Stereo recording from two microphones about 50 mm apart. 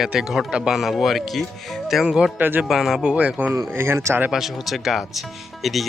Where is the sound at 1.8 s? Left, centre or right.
Centre.